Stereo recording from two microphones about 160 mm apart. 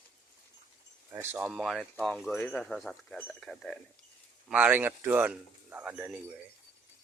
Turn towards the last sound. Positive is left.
turn(degrees=-5)  # may be behind; listen again after turning